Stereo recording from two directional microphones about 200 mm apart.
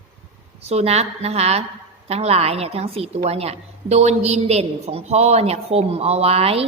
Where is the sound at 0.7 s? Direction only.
30° right (ahead or behind).